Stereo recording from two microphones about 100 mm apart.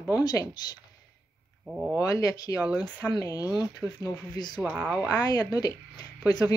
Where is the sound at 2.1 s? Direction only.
35° left (ahead or behind).